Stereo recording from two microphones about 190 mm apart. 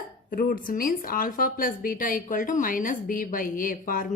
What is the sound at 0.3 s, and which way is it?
A woman's voice, 50° left (ahead or behind).